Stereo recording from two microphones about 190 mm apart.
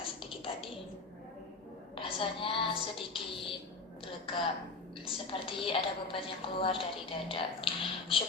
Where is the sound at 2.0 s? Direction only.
30° left (ahead or behind).